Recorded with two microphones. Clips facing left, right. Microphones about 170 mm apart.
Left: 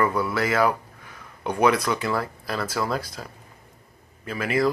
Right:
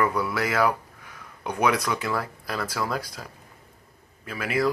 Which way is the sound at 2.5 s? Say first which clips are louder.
Left 2 dB; 5° left (ahead or behind).